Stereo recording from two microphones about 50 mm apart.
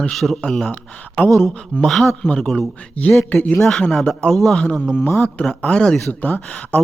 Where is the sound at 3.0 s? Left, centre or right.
Left.